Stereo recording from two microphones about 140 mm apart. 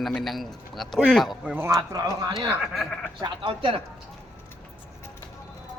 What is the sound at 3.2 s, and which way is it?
Speech, 35° right (ahead or behind).